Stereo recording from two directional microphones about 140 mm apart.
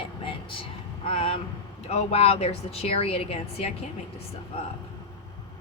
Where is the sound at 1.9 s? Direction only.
45° left (ahead or behind).